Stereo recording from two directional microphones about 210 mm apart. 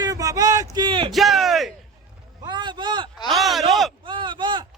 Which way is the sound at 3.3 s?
Centre (ahead or behind).